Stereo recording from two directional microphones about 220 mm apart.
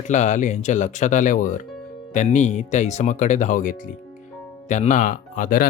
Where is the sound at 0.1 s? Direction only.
35° left (ahead or behind).